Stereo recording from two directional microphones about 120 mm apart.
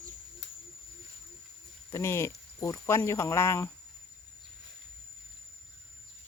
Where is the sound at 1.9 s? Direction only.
20° left (ahead or behind).